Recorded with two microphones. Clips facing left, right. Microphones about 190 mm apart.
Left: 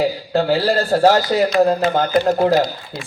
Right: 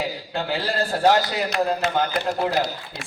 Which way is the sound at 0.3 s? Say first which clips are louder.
Left 8 dB; 40° left (ahead or behind).